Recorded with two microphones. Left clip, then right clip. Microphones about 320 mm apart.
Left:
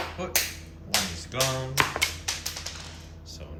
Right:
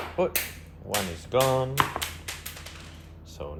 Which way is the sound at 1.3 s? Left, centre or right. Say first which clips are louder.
Right 5 dB; centre.